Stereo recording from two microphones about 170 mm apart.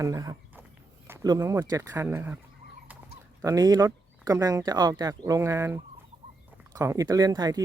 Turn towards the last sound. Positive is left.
turn(degrees=-20)  # may be behind; listen again after turning